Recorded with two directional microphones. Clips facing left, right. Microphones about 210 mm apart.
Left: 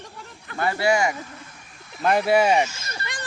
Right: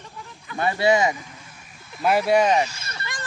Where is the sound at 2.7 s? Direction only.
30° right (ahead or behind).